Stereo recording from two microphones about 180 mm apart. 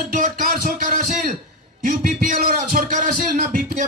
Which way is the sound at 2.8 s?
50° right (ahead or behind).